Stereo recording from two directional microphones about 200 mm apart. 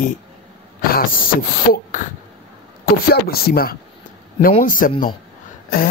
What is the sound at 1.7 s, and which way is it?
A man's voice, 40° left (ahead or behind).